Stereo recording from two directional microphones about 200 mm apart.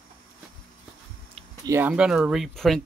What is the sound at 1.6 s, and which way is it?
Speech, 10° right (ahead or behind).